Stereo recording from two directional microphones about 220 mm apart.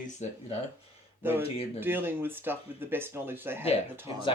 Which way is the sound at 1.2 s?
10° right (ahead or behind).